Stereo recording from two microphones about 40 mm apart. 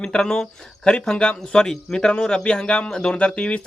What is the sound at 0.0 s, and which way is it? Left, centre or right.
A man's voice, centre.